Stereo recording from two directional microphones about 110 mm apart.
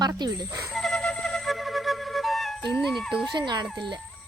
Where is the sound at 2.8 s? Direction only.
Centre (ahead or behind).